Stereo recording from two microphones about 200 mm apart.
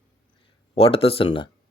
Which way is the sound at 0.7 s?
30° left (ahead or behind).